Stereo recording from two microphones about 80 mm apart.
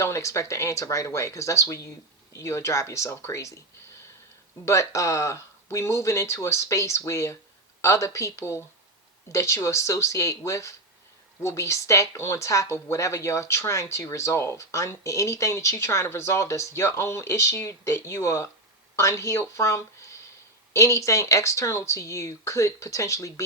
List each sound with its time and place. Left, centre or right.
0.0 s speech: left
4.6 s speech: left